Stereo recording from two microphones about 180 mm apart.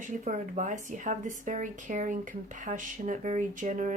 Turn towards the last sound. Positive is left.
turn(degrees=-45)  # may be behind; listen again after turning